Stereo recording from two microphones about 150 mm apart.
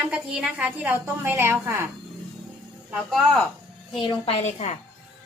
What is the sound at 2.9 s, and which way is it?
Speech, 5° left (ahead or behind).